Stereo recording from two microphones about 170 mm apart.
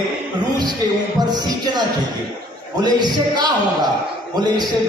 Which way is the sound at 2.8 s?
25° right (ahead or behind).